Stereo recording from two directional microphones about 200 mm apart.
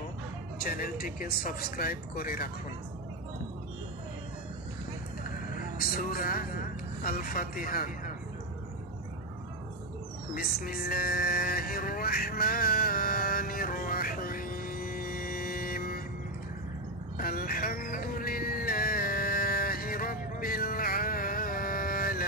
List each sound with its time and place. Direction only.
0.6 s speech: 45° left (ahead or behind)
5.5 s speech: 45° left (ahead or behind)
10.3 s music: 45° left (ahead or behind)
17.2 s music: 45° left (ahead or behind)